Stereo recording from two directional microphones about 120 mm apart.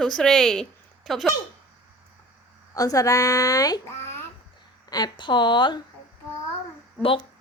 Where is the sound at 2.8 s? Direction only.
30° left (ahead or behind).